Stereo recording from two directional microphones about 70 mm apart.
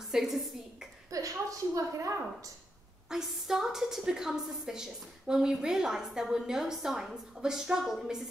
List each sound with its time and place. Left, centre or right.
0.1 s a woman's voice: centre
1.1 s a woman's voice: right
3.1 s a woman's voice: centre